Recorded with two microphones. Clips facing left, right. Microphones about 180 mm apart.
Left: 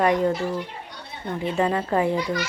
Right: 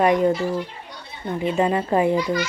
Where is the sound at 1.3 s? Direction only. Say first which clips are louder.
Right 3 dB; 20° right (ahead or behind).